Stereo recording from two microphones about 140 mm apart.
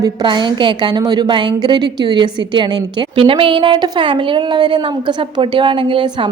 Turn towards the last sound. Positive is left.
turn(degrees=-35)  # may be behind; listen again after turning